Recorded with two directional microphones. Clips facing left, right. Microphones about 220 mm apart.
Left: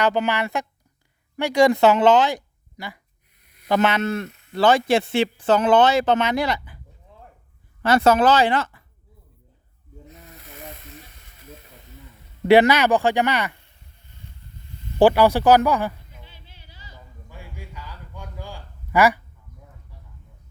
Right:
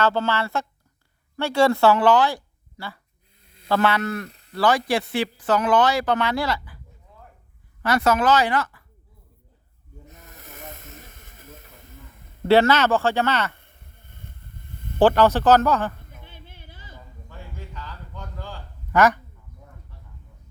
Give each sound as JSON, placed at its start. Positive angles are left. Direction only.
{"t": 0.0, "sound": "speech", "side_deg": 15}
{"t": 3.4, "sound": "a sound", "side_deg": -25}
{"t": 3.7, "sound": "speech", "side_deg": 20}
{"t": 7.8, "sound": "speech", "side_deg": 25}
{"t": 10.1, "sound": "hiss", "side_deg": -45}
{"t": 12.5, "sound": "speech", "side_deg": 15}
{"t": 13.6, "sound": "a sound", "side_deg": -55}
{"t": 14.9, "sound": "speech", "side_deg": 10}
{"t": 16.0, "sound": "music", "side_deg": -55}
{"t": 17.2, "sound": "a sound", "side_deg": 10}